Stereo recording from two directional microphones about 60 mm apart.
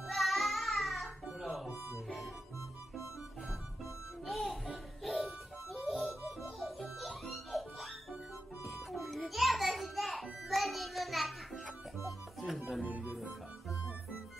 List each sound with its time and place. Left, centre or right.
0.0 s music: centre
4.3 s music: centre
12.8 s music: right
13.1 s music: centre